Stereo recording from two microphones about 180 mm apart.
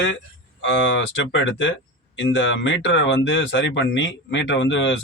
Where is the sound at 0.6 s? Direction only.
90° left.